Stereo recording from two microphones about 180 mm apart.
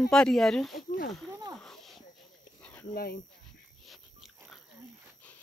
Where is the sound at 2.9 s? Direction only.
60° left (ahead or behind).